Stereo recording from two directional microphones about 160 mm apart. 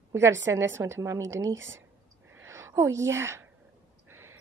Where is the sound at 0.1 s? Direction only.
15° right (ahead or behind).